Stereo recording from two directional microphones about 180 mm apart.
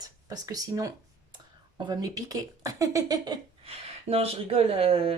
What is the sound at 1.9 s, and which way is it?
Speech, 20° right (ahead or behind).